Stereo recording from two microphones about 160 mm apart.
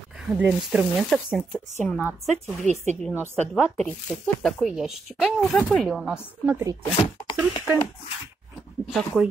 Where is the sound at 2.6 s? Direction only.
45° right (ahead or behind).